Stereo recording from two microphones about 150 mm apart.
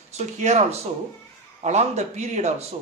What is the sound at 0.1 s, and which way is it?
Speech, 50° right (ahead or behind).